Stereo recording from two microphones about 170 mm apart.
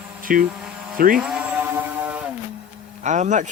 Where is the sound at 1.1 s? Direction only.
5° right (ahead or behind).